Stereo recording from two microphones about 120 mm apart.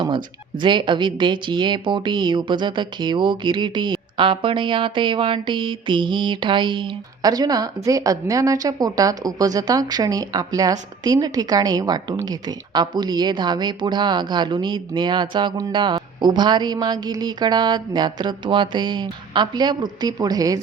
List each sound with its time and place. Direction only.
0.6 s speech: 40° right (ahead or behind)